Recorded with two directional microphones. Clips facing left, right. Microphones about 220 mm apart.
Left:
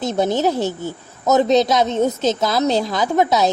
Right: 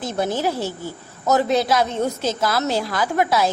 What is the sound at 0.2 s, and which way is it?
A woman's voice, 20° left (ahead or behind).